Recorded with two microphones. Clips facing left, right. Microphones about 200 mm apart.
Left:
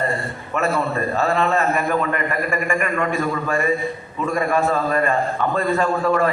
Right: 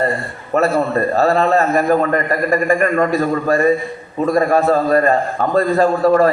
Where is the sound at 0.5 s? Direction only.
35° right (ahead or behind).